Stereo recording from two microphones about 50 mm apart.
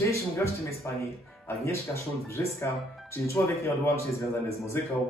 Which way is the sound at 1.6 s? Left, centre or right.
Left.